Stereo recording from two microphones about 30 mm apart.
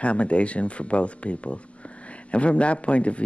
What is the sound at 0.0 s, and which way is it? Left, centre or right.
Speech, left.